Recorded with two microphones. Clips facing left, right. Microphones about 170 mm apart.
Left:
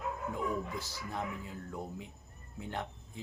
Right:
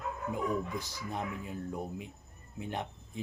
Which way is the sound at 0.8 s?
15° right (ahead or behind).